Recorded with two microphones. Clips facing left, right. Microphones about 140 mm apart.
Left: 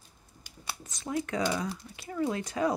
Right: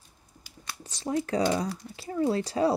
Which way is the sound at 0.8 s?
30° right (ahead or behind).